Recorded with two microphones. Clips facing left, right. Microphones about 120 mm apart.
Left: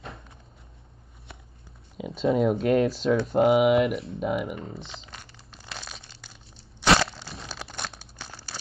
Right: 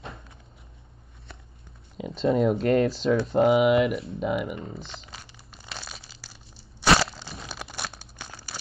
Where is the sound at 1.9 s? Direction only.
Centre (ahead or behind).